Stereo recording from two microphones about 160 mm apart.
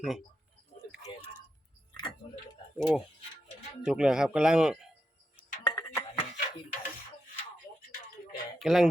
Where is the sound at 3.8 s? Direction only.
5° right (ahead or behind).